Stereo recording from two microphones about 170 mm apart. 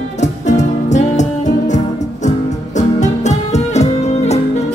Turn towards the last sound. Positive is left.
turn(degrees=40)  # may be behind; listen again after turning